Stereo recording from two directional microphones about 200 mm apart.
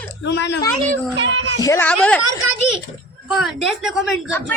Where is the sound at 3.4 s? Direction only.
Centre (ahead or behind).